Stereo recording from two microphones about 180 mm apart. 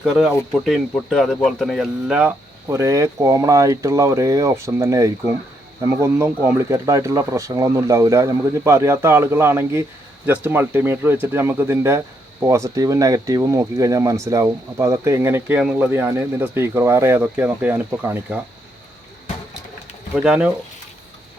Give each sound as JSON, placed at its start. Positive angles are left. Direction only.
{"t": 0.0, "sound": "speech", "side_deg": 0}
{"t": 20.1, "sound": "speech", "side_deg": -5}